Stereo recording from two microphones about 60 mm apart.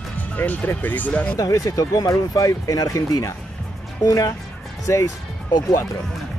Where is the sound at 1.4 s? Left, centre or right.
Left.